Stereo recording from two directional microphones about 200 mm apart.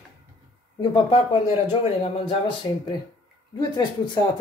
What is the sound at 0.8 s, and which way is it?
Speech, 25° left (ahead or behind).